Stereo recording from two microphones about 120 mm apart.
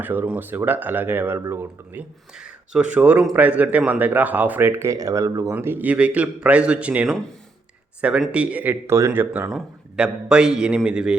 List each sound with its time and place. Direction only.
0.0 s speech: 15° right (ahead or behind)
5.5 s speech: 15° right (ahead or behind)
8.3 s speech: 10° right (ahead or behind)
9.5 s a man's voice: 5° right (ahead or behind)